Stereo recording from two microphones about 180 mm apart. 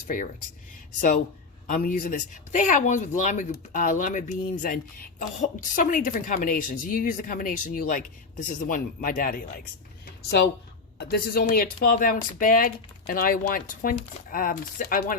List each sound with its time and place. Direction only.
1.6 s speech: 50° left (ahead or behind)
10.2 s speech: 70° left (ahead or behind); by 15.1 s 50° left (ahead or behind)